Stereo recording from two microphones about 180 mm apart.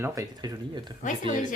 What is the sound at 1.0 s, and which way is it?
Speech, 45° left (ahead or behind).